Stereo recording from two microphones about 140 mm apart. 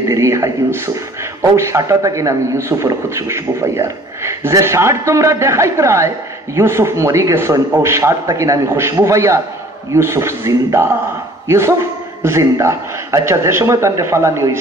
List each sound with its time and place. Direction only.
0.1 s a man's voice: 20° right (ahead or behind)